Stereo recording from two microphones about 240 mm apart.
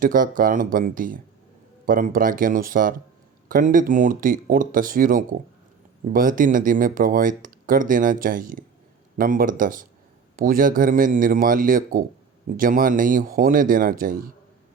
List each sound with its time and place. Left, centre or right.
0.0 s speech: right